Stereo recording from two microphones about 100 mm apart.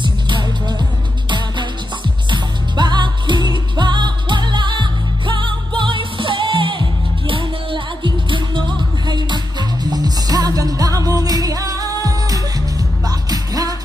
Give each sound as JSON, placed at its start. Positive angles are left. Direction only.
{"t": 0.0, "sound": "music", "side_deg": -50}
{"t": 2.3, "sound": "music", "side_deg": -50}